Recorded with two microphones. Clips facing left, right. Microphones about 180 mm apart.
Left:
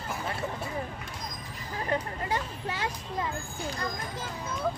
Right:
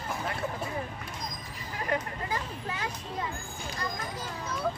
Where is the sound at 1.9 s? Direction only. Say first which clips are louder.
Left 2 dB; 30° left (ahead or behind).